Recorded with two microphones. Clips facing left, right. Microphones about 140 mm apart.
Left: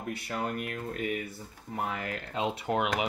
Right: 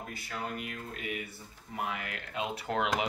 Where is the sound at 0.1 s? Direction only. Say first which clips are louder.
Left 7 dB; 65° left (ahead or behind); by 2.7 s 25° left (ahead or behind).